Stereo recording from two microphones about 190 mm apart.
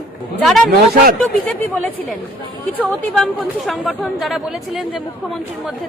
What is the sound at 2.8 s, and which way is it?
A woman's voice, centre (ahead or behind).